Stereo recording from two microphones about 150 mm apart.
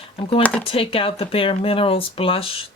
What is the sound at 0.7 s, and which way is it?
Speech, 35° left (ahead or behind).